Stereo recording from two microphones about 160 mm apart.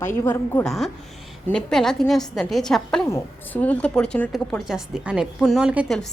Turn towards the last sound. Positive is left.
turn(degrees=-5)  # may be behind; listen again after turning